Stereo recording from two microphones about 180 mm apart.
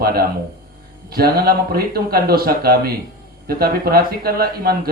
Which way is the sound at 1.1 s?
60° right (ahead or behind).